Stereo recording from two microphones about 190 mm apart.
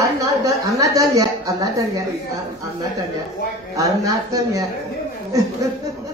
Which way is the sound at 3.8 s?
15° right (ahead or behind).